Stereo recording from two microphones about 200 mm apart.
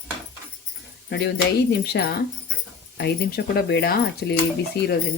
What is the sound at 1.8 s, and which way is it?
Speech, 50° left (ahead or behind).